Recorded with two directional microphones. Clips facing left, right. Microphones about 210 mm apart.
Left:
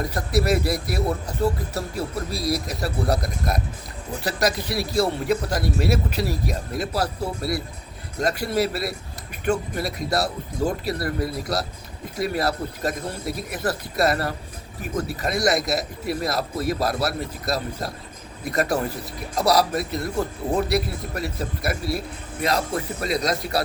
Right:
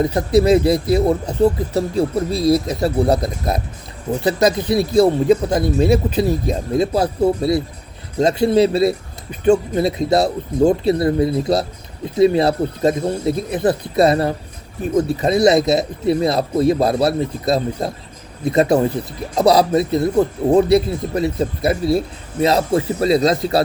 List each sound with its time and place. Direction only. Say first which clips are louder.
0.0 s speech: right 9 dB; 25° right (ahead or behind)